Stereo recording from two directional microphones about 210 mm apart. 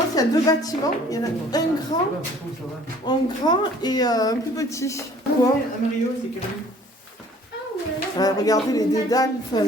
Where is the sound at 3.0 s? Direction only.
20° left (ahead or behind).